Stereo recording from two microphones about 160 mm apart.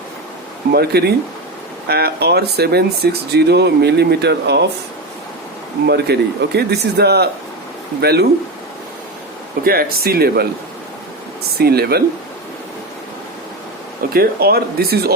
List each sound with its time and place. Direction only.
0.7 s speech: 85° right
5.8 s speech: 90° right
9.6 s speech: 70° right (ahead or behind)
11.5 s speech: 80° right
14.1 s speech: 70° right (ahead or behind)